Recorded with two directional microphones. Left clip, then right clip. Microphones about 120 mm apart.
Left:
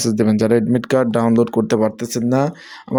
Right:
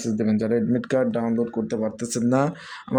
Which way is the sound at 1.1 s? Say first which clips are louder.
Left 9 dB; 85° left.